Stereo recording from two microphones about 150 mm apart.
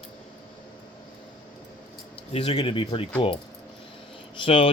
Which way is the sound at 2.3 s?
40° left (ahead or behind).